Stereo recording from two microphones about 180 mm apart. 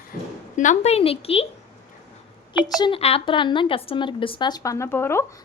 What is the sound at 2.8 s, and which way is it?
Speech, 30° left (ahead or behind).